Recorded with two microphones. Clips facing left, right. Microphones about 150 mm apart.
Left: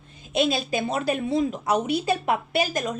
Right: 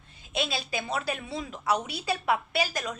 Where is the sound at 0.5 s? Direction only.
50° left (ahead or behind).